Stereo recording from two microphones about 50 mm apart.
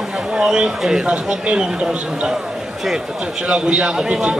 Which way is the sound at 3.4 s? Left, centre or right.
Centre.